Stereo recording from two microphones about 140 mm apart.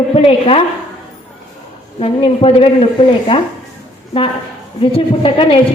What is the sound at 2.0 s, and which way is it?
Speech, 45° left (ahead or behind).